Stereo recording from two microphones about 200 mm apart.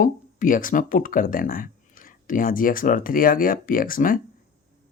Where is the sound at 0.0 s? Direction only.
40° left (ahead or behind).